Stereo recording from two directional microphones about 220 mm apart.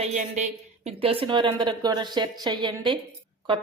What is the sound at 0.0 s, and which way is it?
A woman's voice, 35° right (ahead or behind).